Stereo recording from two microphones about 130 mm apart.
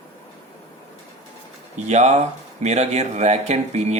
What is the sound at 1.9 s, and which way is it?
Speech, 60° right (ahead or behind).